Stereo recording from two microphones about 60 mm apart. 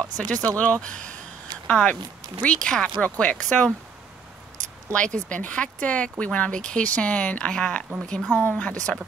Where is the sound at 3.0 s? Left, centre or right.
Left.